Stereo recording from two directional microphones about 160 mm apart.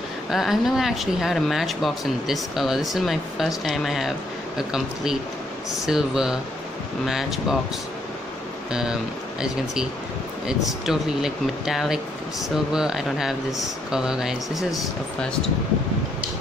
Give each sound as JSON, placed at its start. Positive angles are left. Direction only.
{"t": 0.3, "sound": "speech", "side_deg": 0}
{"t": 10.4, "sound": "speech", "side_deg": -5}